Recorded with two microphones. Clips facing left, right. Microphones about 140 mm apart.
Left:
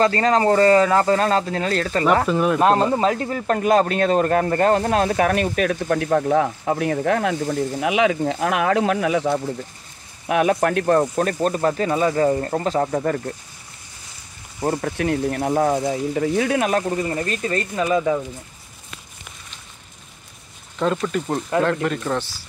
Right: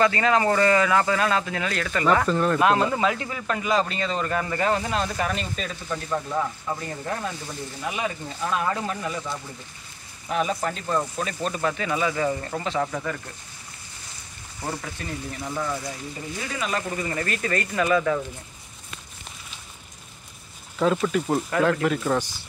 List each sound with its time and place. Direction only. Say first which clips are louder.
0.0 s speech: left 3 dB; 35° left (ahead or behind)
2.2 s speech: left 3 dB; 10° left (ahead or behind)
2.6 s speech: left 5 dB; 35° left (ahead or behind); by 9.4 s 80° left
10.2 s speech: left 7 dB; 65° left (ahead or behind); by 13.3 s 45° left (ahead or behind)
14.6 s speech: left 9 dB; 50° left (ahead or behind)
15.0 s speech: left 12 dB; 70° left (ahead or behind)
16.9 s speech: left 6 dB; 35° left (ahead or behind)
17.2 s speech: left 3 dB; 25° left (ahead or behind)
20.8 s speech: even; 5° right (ahead or behind)